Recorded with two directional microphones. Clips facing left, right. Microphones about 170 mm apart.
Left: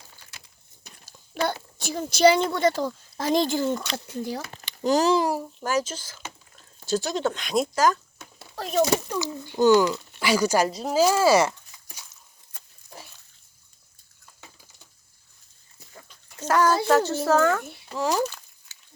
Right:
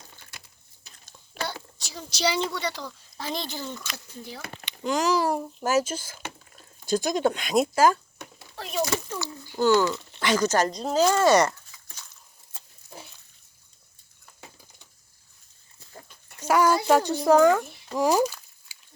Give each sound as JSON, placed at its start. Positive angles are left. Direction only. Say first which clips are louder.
{"t": 1.5, "sound": "a child's voice", "louder": "left 8 dB", "side_deg": 55}
{"t": 3.9, "sound": "speech", "louder": "left 10 dB", "side_deg": 65}
{"t": 4.2, "sound": "speech", "louder": "left 8 dB", "side_deg": 40}
{"t": 5.6, "sound": "speech", "louder": "right 3 dB", "side_deg": -10}
{"t": 8.5, "sound": "a sound", "louder": "left 6 dB", "side_deg": 40}
{"t": 9.1, "sound": "speech", "louder": "left 4 dB", "side_deg": 20}
{"t": 16.4, "sound": "speech", "louder": "even", "side_deg": -10}